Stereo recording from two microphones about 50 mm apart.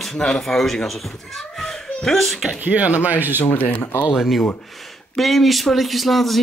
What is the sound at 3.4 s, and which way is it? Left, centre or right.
Speech, left.